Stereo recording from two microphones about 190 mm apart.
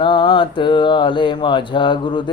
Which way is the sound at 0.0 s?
25° left (ahead or behind).